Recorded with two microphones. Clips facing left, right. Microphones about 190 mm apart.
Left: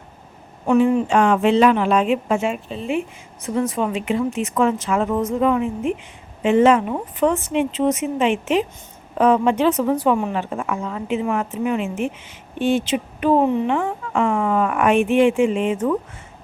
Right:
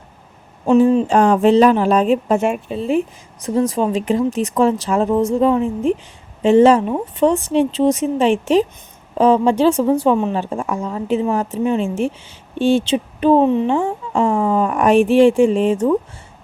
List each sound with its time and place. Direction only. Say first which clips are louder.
1.0 s speech: right 3 dB; 35° right (ahead or behind)